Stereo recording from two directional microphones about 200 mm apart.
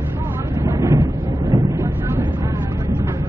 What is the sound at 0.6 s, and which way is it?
Vehicle, 15° right (ahead or behind).